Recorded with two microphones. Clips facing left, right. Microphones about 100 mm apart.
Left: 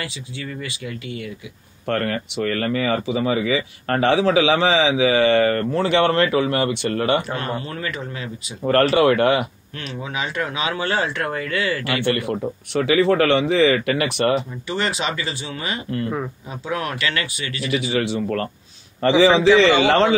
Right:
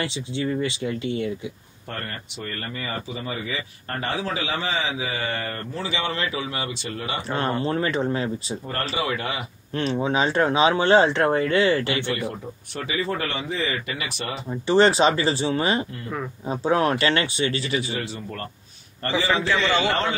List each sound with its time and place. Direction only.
0.0 s speech: 25° right (ahead or behind)
1.9 s speech: 80° left
7.2 s speech: 30° right (ahead or behind)
8.6 s speech: 70° left (ahead or behind)
9.8 s speech: 30° right (ahead or behind)
12.3 s speech: 90° left; by 14.4 s 65° left (ahead or behind)
14.5 s speech: 35° right (ahead or behind)
17.6 s speech: 90° left